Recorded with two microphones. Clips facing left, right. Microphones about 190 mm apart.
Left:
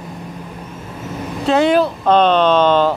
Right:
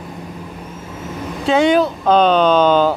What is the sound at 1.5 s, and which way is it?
Speech, centre (ahead or behind).